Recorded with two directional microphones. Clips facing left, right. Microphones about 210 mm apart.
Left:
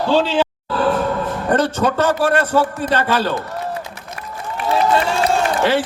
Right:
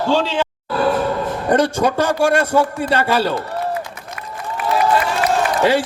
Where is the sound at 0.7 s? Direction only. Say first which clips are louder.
Right 3 dB; 10° right (ahead or behind).